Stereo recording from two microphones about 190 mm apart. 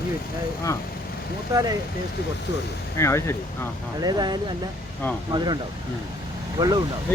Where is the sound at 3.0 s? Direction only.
15° left (ahead or behind).